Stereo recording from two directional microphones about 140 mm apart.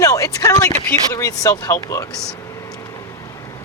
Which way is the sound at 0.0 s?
25° left (ahead or behind).